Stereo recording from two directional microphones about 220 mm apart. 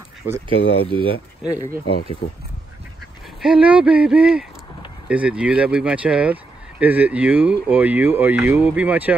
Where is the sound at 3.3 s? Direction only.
5° right (ahead or behind).